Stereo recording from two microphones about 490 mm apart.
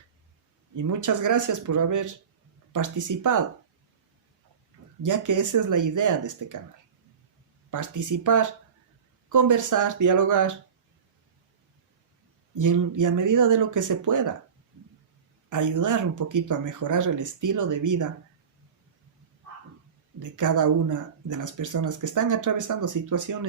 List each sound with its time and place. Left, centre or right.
0.8 s speech: right
5.0 s speech: right
7.7 s speech: right
12.5 s speech: right
15.4 s speech: right
20.1 s speech: right